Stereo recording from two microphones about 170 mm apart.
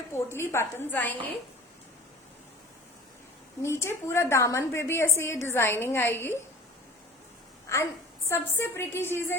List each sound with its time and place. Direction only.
0.1 s a woman's voice: 15° left (ahead or behind)
3.6 s a woman's voice: 15° left (ahead or behind)
7.7 s a woman's voice: 15° left (ahead or behind)